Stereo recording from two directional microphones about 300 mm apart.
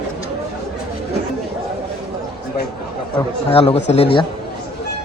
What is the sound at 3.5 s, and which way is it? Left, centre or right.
Speech, centre.